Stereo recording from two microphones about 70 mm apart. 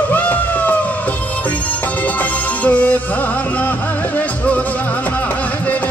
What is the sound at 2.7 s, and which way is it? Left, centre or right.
Music, left.